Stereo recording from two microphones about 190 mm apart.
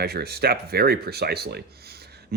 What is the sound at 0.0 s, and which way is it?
Speech, 55° right (ahead or behind).